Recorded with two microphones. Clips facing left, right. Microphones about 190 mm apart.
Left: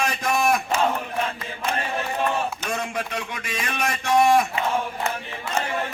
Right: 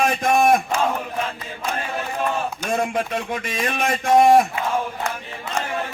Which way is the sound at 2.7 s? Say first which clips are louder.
Right 6 dB; 50° right (ahead or behind).